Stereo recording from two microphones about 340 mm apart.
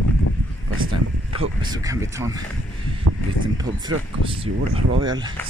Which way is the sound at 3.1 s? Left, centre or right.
Right.